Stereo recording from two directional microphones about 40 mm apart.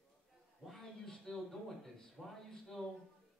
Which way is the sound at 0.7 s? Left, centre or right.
Centre.